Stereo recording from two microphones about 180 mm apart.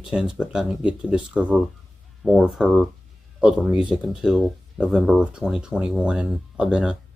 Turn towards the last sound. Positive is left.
turn(degrees=-5)  # may be behind; listen again after turning